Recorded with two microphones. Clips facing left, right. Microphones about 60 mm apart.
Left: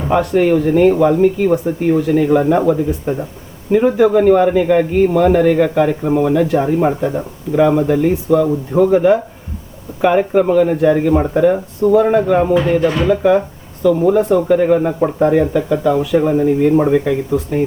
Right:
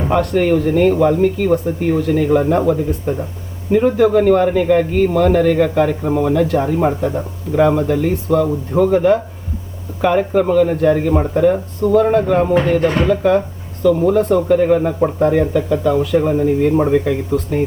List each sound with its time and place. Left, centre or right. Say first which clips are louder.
0.1 s speech: left 2 dB; centre
12.8 s speech: even; right
13.1 s speech: left 2 dB; centre